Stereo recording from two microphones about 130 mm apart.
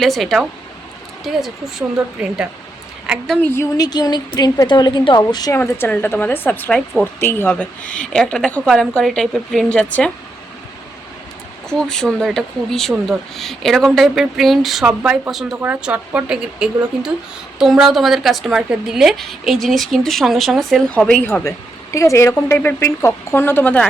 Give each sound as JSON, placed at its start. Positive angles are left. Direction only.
{"t": 0.0, "sound": "speech", "side_deg": 0}
{"t": 3.4, "sound": "a woman's voice", "side_deg": 20}
{"t": 5.5, "sound": "a woman's voice", "side_deg": 15}
{"t": 11.7, "sound": "a woman's voice", "side_deg": 5}
{"t": 21.9, "sound": "speech", "side_deg": 20}